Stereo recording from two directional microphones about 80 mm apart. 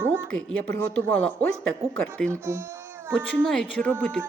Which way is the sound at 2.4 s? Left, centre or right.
Right.